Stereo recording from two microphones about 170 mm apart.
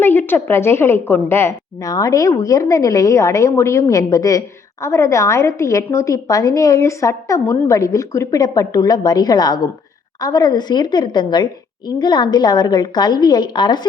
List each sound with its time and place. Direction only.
0.0 s a woman's voice: 10° left (ahead or behind)